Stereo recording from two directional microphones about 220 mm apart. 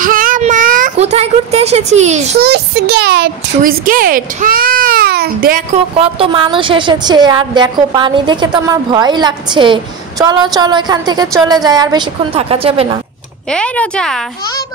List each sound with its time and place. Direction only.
0.0 s child singing: 40° right (ahead or behind)
2.4 s speech: 50° right (ahead or behind)
5.9 s a woman's voice: 25° right (ahead or behind)
13.5 s speech: 5° left (ahead or behind)